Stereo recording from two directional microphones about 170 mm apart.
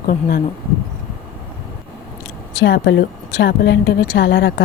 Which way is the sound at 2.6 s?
90° left.